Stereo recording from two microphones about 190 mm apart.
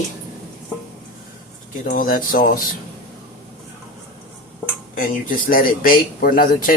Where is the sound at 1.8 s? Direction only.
45° left (ahead or behind).